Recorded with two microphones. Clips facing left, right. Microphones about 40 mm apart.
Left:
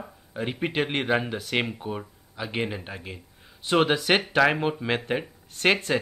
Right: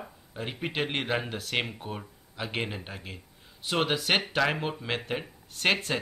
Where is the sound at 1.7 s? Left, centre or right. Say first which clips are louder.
Left 5 dB; centre.